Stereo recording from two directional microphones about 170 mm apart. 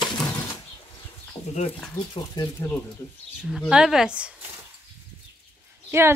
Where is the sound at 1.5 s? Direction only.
40° left (ahead or behind).